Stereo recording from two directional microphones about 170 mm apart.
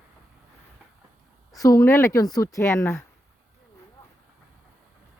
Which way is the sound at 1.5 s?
20° left (ahead or behind).